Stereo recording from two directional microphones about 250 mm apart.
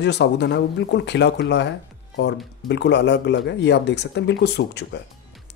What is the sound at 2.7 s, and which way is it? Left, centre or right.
Speech, left.